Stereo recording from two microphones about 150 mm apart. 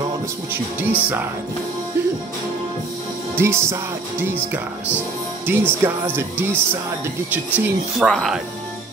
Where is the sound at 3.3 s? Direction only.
15° right (ahead or behind).